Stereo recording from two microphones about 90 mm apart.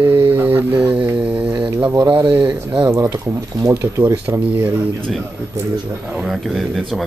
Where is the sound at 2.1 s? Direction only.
65° right (ahead or behind).